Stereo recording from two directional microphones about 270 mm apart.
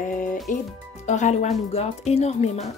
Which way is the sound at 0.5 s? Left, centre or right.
Left.